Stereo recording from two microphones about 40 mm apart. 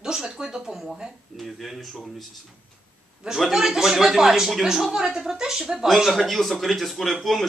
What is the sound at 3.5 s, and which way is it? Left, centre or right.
Speech, centre.